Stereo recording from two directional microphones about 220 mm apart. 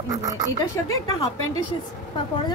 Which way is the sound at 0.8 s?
15° left (ahead or behind).